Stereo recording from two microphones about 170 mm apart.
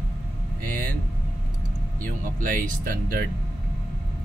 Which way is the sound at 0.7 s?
55° right (ahead or behind).